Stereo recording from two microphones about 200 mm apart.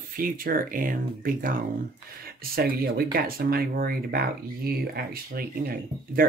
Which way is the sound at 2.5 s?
50° right (ahead or behind).